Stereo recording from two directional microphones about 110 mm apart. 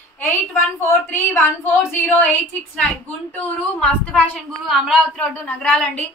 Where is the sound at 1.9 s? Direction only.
15° left (ahead or behind).